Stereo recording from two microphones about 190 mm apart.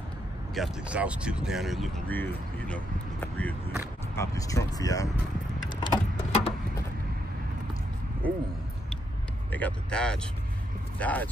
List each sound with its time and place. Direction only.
0.6 s speech: 5° right (ahead or behind); by 5.1 s 20° left (ahead or behind)
5.7 s a sound: 30° left (ahead or behind)
9.5 s speech: 10° left (ahead or behind)